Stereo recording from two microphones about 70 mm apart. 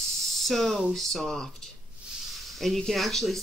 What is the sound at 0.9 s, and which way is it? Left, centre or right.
Speech, centre.